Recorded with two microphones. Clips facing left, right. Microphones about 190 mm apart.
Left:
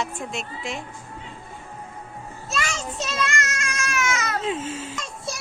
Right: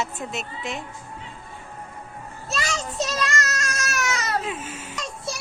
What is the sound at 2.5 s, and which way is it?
A child's voice, 35° right (ahead or behind).